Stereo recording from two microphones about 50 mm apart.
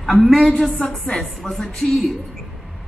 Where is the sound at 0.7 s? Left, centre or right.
Centre.